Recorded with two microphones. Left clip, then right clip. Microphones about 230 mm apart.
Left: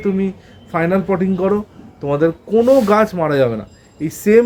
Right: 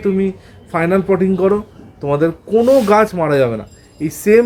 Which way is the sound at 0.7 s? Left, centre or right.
Centre.